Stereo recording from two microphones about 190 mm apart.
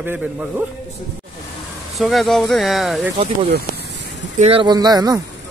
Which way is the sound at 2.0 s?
Centre (ahead or behind).